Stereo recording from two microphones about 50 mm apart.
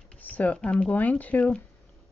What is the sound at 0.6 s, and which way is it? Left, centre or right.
Speech, left.